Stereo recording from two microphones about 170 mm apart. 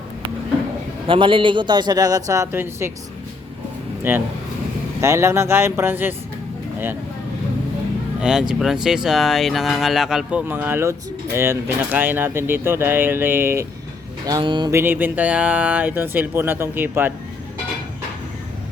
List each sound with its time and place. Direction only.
1.0 s a man's voice: 30° right (ahead or behind); by 2.9 s 15° right (ahead or behind)
4.1 s speech: 10° right (ahead or behind)
8.2 s speech: 5° right (ahead or behind)
14.3 s a man's voice: 25° right (ahead or behind)
14.7 s speech: 15° right (ahead or behind)